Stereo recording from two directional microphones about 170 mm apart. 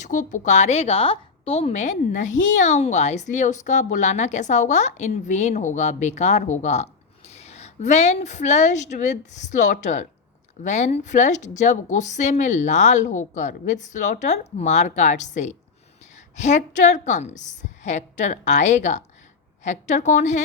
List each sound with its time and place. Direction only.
0.0 s a woman's voice: 45° left (ahead or behind)